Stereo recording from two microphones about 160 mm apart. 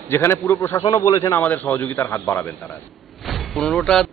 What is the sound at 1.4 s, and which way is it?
A man's voice, 10° left (ahead or behind).